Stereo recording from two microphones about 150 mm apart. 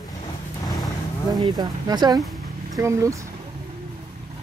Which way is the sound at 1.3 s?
25° right (ahead or behind).